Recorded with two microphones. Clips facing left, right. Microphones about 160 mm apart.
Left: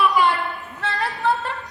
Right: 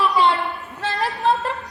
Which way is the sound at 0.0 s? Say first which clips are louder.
Even; 20° right (ahead or behind).